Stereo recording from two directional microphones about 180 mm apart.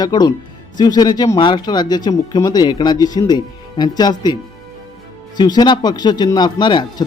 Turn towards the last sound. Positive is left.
turn(degrees=25)  # may be behind; listen again after turning